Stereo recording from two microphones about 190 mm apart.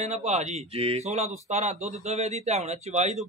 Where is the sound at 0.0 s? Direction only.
35° right (ahead or behind).